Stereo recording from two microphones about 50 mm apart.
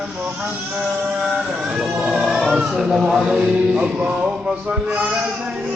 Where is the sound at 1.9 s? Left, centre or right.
Centre.